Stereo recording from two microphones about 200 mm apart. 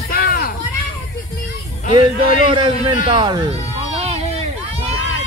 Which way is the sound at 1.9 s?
25° right (ahead or behind).